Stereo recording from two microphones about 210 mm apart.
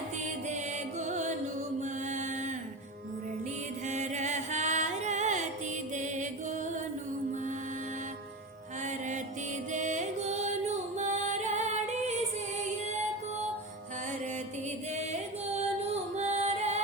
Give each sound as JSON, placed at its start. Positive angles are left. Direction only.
{"t": 0.3, "sound": "music", "side_deg": -35}
{"t": 3.8, "sound": "music", "side_deg": -35}
{"t": 8.8, "sound": "music", "side_deg": -35}
{"t": 14.9, "sound": "music", "side_deg": -30}